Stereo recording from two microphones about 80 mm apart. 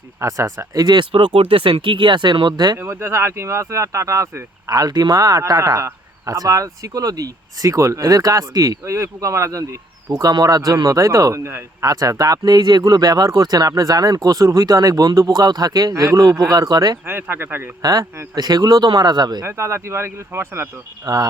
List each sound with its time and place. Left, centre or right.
0.2 s speech: right
0.9 s speech: right
2.7 s speech: right
8.8 s speech: right
10.1 s speech: right
11.9 s speech: right
17.1 s speech: right
18.3 s speech: right
19.5 s speech: right